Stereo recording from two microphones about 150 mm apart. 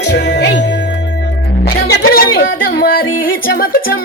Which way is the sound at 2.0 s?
80° left.